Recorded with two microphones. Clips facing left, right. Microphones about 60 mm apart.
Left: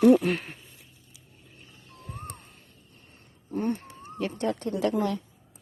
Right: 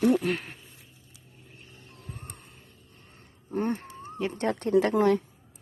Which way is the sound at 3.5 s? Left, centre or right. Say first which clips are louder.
Even; right.